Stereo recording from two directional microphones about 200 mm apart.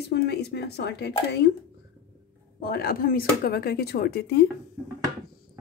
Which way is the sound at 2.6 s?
50° left (ahead or behind).